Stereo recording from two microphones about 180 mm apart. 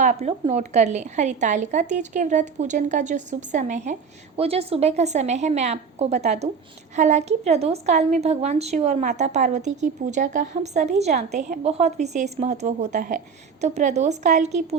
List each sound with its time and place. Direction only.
0.0 s a woman's voice: 40° right (ahead or behind)